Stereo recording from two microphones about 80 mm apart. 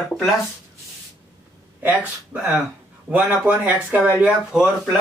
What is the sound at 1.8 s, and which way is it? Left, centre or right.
Speech, right.